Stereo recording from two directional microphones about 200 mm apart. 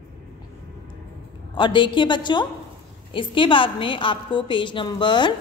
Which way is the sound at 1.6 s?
25° left (ahead or behind).